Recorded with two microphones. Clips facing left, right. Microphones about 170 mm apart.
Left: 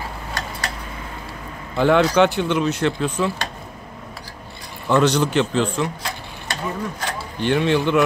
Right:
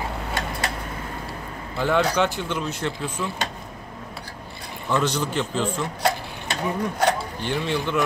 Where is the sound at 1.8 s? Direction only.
70° left (ahead or behind).